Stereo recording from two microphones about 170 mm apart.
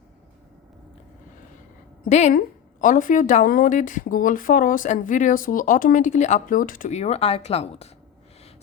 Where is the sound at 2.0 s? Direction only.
45° left (ahead or behind).